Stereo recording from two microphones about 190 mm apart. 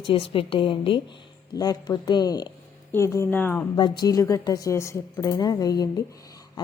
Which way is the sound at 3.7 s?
20° left (ahead or behind).